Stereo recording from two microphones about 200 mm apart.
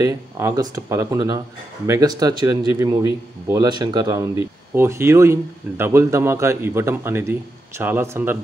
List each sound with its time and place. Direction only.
0.0 s speech: 15° right (ahead or behind)